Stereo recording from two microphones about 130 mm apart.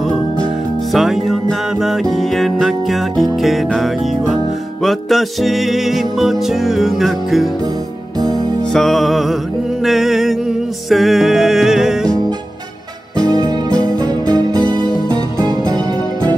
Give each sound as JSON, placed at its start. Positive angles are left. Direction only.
{"t": 0.9, "sound": "music", "side_deg": 0}
{"t": 8.7, "sound": "music", "side_deg": 0}
{"t": 13.2, "sound": "music", "side_deg": -30}